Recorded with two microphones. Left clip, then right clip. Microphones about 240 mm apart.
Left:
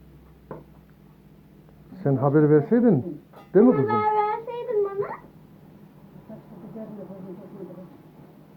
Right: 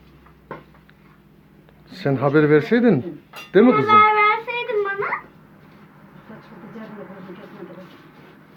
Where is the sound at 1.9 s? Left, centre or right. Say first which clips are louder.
Right 3 dB; right.